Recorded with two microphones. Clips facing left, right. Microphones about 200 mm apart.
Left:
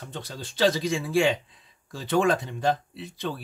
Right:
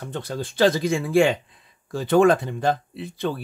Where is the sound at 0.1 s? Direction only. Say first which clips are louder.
Right 10 dB; 55° right (ahead or behind).